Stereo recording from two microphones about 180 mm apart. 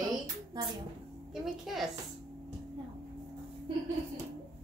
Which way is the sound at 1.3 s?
Centre (ahead or behind).